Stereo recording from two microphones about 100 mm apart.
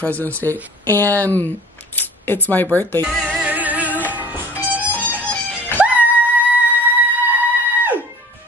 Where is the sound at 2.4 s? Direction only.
15° left (ahead or behind).